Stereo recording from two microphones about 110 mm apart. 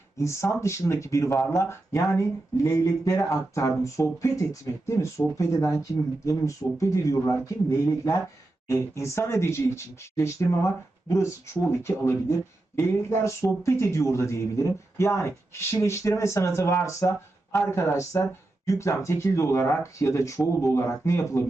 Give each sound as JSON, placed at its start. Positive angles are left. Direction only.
{"t": 0.2, "sound": "speech", "side_deg": 25}